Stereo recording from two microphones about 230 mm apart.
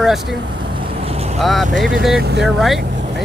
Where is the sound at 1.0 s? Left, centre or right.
Right.